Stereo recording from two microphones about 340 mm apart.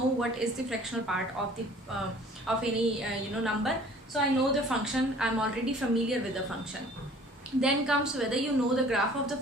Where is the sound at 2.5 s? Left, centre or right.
Centre.